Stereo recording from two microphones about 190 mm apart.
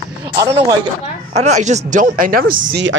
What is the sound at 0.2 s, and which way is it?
Speech, 20° right (ahead or behind).